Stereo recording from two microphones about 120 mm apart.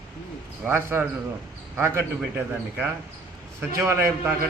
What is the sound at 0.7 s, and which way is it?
A man's voice, 20° right (ahead or behind).